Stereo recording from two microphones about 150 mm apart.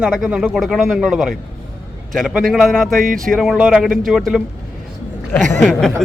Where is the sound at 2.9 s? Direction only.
65° right (ahead or behind).